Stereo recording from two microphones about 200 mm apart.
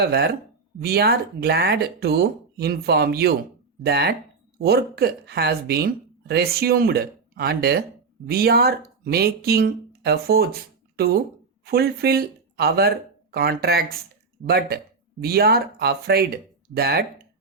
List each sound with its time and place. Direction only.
0.0 s speech: 55° right (ahead or behind)
11.6 s speech: 50° right (ahead or behind)